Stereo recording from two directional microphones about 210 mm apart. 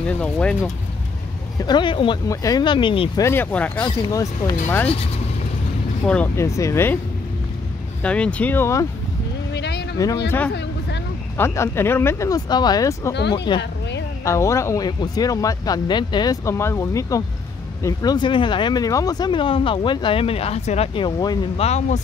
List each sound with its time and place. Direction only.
0.0 s speech: 5° left (ahead or behind)
1.6 s speech: 20° left (ahead or behind)
3.3 s speech: 10° left (ahead or behind)
6.0 s speech: 5° left (ahead or behind)
8.0 s speech: 5° left (ahead or behind)
9.5 s vehicle: 55° left (ahead or behind)
9.9 s speech: 15° left (ahead or behind)
11.3 s speech: 10° left (ahead or behind)
13.6 s music: 55° left (ahead or behind)
14.2 s speech: 15° left (ahead or behind); by 22.0 s 30° left (ahead or behind)